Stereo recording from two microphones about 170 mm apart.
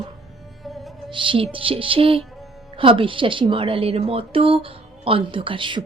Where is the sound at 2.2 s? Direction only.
Centre (ahead or behind).